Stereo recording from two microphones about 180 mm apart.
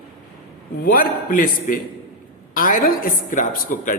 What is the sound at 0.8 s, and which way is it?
A woman's voice, 55° left (ahead or behind).